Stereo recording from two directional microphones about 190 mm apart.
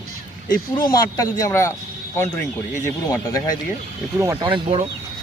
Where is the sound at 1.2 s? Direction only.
15° left (ahead or behind).